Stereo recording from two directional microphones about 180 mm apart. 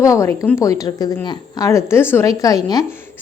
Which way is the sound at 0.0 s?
15° left (ahead or behind).